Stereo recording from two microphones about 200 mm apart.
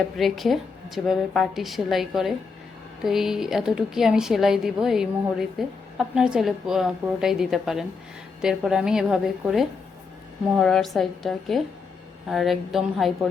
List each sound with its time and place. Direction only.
0.2 s a woman's voice: centre (ahead or behind)